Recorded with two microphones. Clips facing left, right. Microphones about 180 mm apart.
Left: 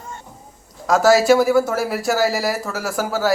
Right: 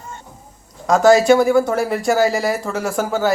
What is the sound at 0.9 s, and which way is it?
Speech, 5° left (ahead or behind).